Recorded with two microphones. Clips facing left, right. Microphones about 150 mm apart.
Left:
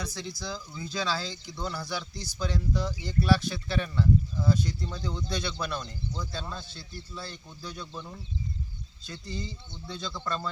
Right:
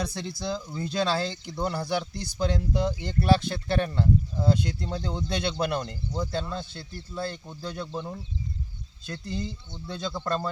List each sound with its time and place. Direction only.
0.0 s speech: 60° right (ahead or behind)
9.0 s speech: 55° right (ahead or behind)